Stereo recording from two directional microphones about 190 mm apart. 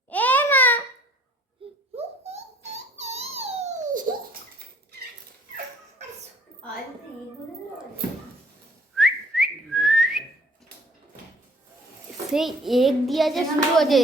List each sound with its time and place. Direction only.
0.1 s babbling: 10° left (ahead or behind)
2.0 s a sound: 35° right (ahead or behind)
9.0 s whistling: centre (ahead or behind)
12.3 s a child's voice: centre (ahead or behind)